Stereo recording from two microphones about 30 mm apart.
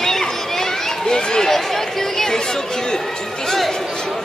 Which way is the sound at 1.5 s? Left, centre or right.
Centre.